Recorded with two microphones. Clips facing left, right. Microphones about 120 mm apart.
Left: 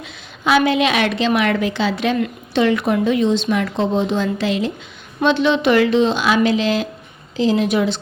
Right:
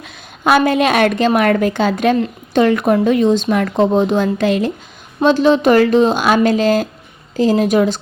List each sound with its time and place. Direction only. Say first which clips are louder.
0.0 s speech: right 4 dB; 50° right (ahead or behind)
5.2 s speech: right 4 dB; 40° right (ahead or behind)